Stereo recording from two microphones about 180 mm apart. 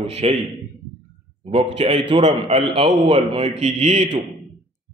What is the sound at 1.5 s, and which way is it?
A man's voice, 35° right (ahead or behind).